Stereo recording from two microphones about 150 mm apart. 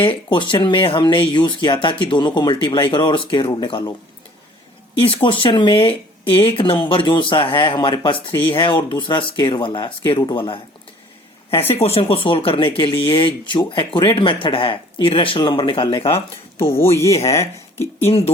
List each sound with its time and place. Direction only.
0.3 s speech: 35° left (ahead or behind)
4.9 s speech: 35° left (ahead or behind)
11.7 s speech: 40° left (ahead or behind)
16.7 s speech: 15° left (ahead or behind)
18.0 s speech: 40° left (ahead or behind)